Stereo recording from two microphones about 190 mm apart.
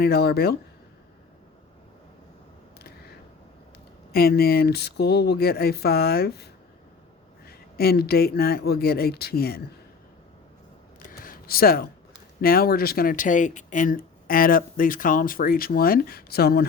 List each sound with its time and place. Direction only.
0.0 s speech: 55° left (ahead or behind)
4.1 s speech: 55° left (ahead or behind)
11.2 s a sound: 50° left (ahead or behind)
12.4 s speech: 50° left (ahead or behind)